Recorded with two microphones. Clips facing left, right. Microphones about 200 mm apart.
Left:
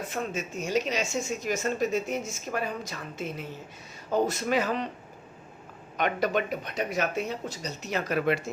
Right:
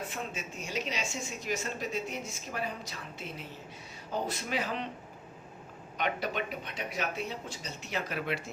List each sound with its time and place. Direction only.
0.1 s a woman's voice: 40° left (ahead or behind)
6.0 s a woman's voice: 45° left (ahead or behind)